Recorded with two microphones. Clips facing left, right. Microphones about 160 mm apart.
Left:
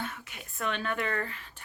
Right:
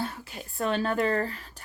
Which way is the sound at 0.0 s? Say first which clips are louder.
Right 5 dB; 35° right (ahead or behind).